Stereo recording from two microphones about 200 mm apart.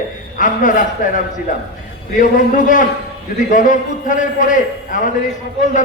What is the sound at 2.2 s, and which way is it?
A man's voice, 40° left (ahead or behind).